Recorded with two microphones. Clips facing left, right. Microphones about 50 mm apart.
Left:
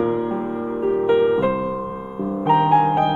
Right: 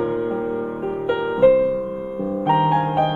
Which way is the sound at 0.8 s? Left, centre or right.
Centre.